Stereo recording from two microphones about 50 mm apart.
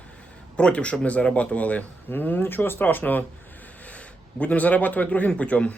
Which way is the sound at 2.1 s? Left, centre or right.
Left.